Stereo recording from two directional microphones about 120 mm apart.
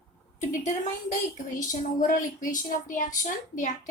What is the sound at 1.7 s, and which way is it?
A woman's voice, 90° left.